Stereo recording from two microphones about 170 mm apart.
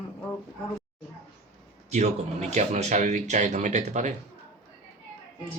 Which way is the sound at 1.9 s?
40° right (ahead or behind).